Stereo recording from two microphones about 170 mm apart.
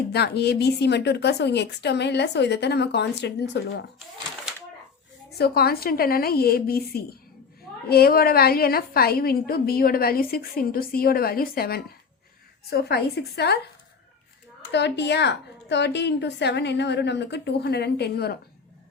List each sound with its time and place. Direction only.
0.1 s a woman's voice: 70° left (ahead or behind)
5.4 s a woman's voice: 65° left (ahead or behind)
14.7 s a woman's voice: 90° left; by 18.3 s 70° left (ahead or behind)